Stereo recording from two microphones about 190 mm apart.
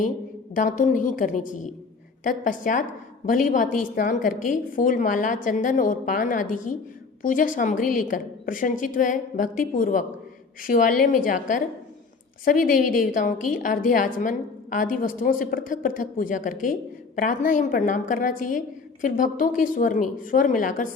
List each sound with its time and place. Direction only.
0.5 s a woman's voice: 45° left (ahead or behind)